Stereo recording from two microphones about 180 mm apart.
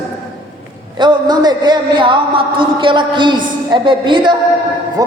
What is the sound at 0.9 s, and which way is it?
A man's voice, 25° right (ahead or behind).